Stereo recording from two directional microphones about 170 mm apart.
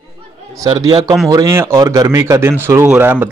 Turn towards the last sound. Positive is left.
turn(degrees=-10)  # may be behind; listen again after turning